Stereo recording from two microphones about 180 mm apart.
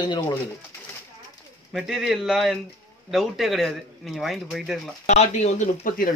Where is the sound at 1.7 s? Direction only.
Centre (ahead or behind).